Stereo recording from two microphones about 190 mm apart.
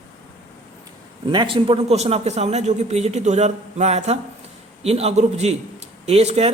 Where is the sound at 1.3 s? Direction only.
25° right (ahead or behind).